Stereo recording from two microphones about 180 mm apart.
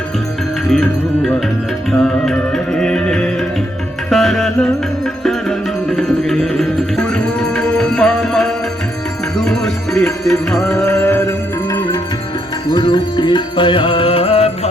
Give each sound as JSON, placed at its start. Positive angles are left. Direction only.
{"t": 0.7, "sound": "music", "side_deg": 0}